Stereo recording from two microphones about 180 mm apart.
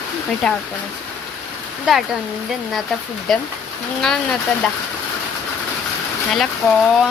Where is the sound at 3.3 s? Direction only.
Centre (ahead or behind).